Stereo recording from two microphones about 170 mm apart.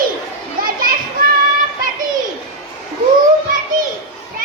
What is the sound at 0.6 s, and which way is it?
Children playing, 55° right (ahead or behind).